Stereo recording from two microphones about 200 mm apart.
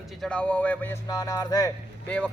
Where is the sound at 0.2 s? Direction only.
5° left (ahead or behind).